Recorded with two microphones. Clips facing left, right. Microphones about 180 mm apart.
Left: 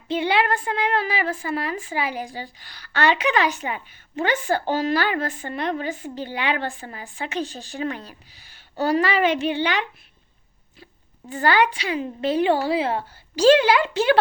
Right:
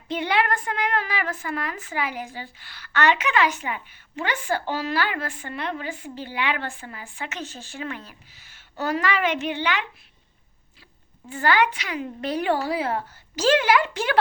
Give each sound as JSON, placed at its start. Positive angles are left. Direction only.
{"t": 0.1, "sound": "a woman's voice", "side_deg": 25}
{"t": 11.3, "sound": "a woman's voice", "side_deg": 35}